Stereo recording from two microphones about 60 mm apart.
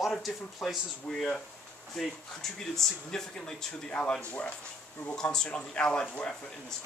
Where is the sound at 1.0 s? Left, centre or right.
Centre.